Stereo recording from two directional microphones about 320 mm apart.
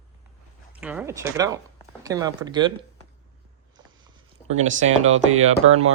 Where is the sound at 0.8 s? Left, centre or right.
Centre.